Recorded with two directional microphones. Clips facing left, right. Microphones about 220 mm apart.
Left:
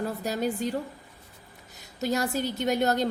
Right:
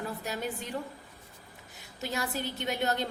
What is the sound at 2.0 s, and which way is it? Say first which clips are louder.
A woman's voice: left 7 dB; 40° left (ahead or behind).